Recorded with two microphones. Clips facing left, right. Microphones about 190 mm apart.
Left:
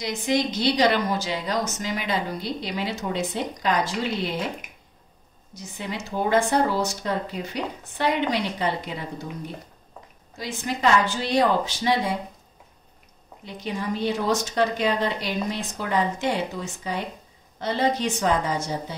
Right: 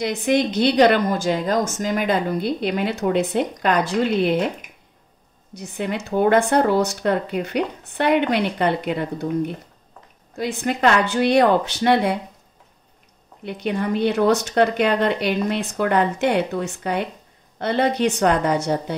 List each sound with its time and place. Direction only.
0.0 s a woman's voice: 55° right (ahead or behind)
5.5 s a woman's voice: 60° right (ahead or behind)
10.3 s a woman's voice: 60° right (ahead or behind)
13.5 s a woman's voice: 60° right (ahead or behind)